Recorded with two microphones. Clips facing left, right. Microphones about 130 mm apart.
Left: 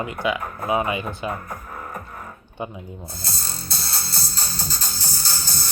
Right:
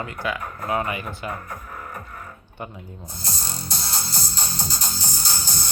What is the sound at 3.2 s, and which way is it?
Music, 15° right (ahead or behind).